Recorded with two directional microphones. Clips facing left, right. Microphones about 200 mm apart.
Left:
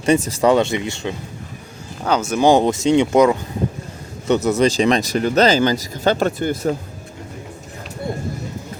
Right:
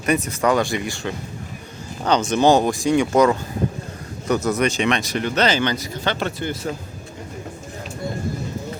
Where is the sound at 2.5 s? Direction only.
25° left (ahead or behind); by 6.7 s 45° left (ahead or behind).